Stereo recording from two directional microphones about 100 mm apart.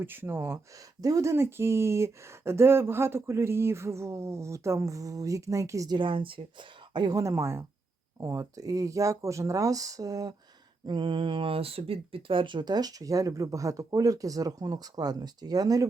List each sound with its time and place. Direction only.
0.0 s speech: 20° right (ahead or behind)
0.8 s speech: 35° right (ahead or behind)
6.0 s speech: 60° right (ahead or behind)
7.1 s speech: 30° right (ahead or behind)
10.8 s speech: 50° right (ahead or behind)